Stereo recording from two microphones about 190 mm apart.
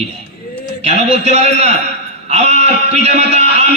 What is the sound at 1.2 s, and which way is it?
A man's voice, 35° right (ahead or behind).